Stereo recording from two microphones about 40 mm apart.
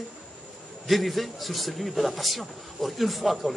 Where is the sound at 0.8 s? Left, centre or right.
Centre.